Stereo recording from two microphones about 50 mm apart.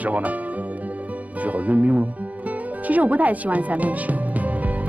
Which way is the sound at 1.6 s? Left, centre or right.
Right.